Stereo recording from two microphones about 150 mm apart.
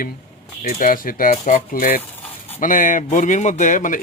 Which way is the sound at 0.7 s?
65° left (ahead or behind).